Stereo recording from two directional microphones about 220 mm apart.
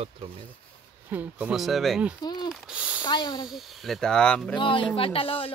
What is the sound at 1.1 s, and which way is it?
Speech, 5° right (ahead or behind).